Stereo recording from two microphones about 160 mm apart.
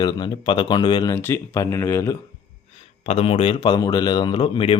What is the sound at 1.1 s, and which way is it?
A man's voice, 15° left (ahead or behind).